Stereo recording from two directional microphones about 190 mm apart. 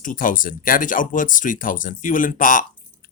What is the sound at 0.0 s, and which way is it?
Speech, 45° left (ahead or behind).